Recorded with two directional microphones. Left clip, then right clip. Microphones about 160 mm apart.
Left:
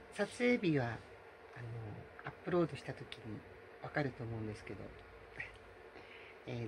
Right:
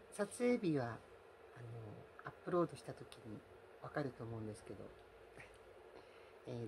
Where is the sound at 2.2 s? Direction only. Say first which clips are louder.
Left 3 dB; 20° right (ahead or behind).